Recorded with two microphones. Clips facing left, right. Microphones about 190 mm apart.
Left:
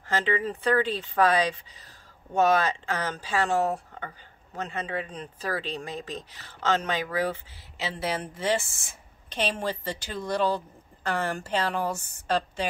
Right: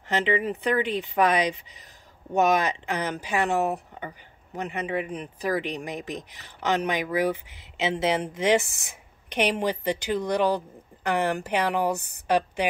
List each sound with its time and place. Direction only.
0.1 s speech: 20° right (ahead or behind)